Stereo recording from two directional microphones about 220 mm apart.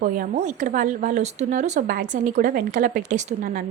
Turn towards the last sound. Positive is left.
turn(degrees=-40)  # may be behind; listen again after turning